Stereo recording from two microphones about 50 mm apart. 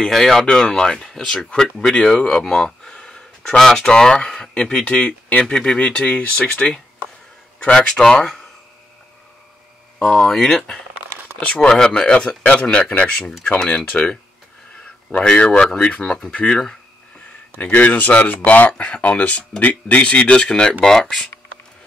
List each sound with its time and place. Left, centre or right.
0.0 s speech: centre
9.9 s speech: centre
10.3 s speech: centre
11.3 s speech: left
15.2 s speech: left
17.6 s speech: left
18.7 s speech: left
20.0 s speech: left